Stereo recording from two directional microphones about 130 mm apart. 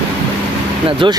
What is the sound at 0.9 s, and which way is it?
Speech, 40° right (ahead or behind).